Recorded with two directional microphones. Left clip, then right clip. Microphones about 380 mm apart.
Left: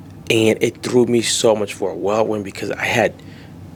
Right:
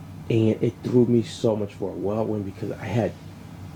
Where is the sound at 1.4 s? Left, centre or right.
Centre.